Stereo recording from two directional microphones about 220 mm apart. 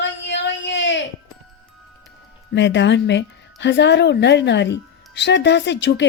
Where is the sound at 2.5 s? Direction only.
55° left (ahead or behind).